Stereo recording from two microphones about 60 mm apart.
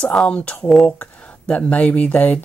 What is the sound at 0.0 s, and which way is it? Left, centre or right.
Speech, centre.